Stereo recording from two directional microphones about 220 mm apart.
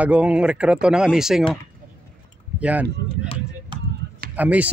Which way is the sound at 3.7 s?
20° right (ahead or behind).